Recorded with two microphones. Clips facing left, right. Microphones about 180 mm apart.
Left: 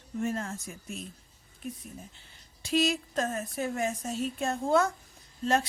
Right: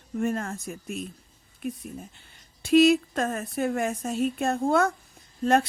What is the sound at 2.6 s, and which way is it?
Speech, 55° right (ahead or behind).